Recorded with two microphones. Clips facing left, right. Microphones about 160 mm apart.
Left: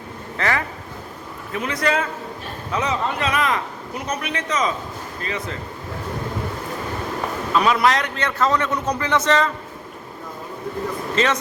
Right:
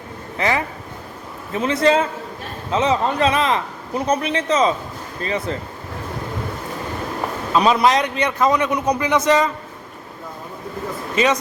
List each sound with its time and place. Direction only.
0.3 s a man's voice: 20° right (ahead or behind); by 5.5 s 35° right (ahead or behind)
7.5 s a man's voice: 20° right (ahead or behind)
11.1 s a man's voice: 10° right (ahead or behind)